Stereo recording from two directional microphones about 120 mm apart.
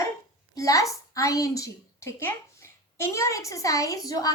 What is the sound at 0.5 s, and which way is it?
A woman's voice, 30° left (ahead or behind).